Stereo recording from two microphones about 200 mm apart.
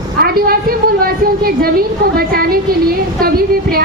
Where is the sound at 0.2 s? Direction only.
45° right (ahead or behind).